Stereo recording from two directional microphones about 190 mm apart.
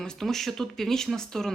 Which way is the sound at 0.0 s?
Centre (ahead or behind).